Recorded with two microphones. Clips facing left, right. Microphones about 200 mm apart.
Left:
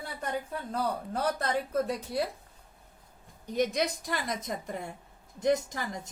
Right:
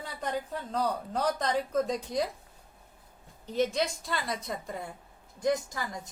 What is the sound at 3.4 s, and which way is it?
A woman's voice, 10° left (ahead or behind).